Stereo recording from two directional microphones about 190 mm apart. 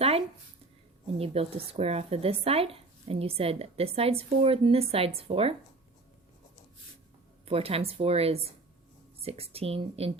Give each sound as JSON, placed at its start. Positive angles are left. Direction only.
{"t": 1.2, "sound": "speech", "side_deg": -30}
{"t": 7.4, "sound": "speech", "side_deg": -30}